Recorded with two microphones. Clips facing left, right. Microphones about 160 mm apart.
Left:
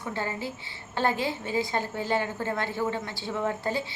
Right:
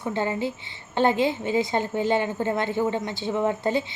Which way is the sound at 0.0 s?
20° right (ahead or behind).